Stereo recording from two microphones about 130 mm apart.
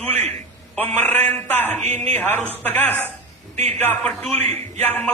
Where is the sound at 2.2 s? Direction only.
15° left (ahead or behind).